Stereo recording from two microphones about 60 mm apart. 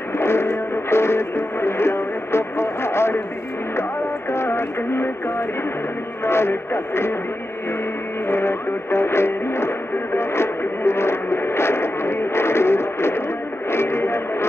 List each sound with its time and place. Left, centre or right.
0.2 s music: left
4.3 s radio: left
6.2 s speech: left
8.3 s music: left
13.7 s radio: left